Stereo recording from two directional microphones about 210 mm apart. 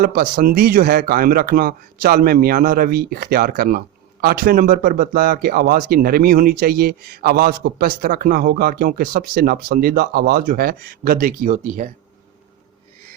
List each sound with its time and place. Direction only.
0.0 s speech: 45° right (ahead or behind)